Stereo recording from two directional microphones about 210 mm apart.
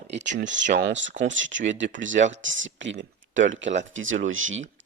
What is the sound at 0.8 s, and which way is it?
Speech, 55° right (ahead or behind).